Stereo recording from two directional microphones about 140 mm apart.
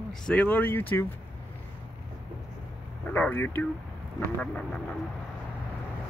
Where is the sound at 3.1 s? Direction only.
10° left (ahead or behind).